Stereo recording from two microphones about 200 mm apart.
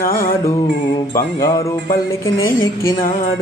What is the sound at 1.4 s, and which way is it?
Music, 15° left (ahead or behind).